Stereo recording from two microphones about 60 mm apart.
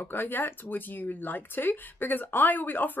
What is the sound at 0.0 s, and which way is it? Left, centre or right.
Speech, left.